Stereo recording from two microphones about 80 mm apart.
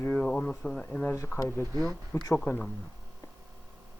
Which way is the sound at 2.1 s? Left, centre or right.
Left.